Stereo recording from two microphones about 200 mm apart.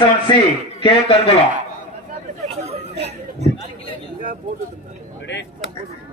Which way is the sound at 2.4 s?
30° right (ahead or behind).